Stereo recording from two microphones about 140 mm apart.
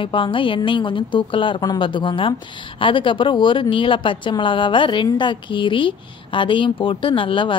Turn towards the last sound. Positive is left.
turn(degrees=35)  # may be behind; listen again after turning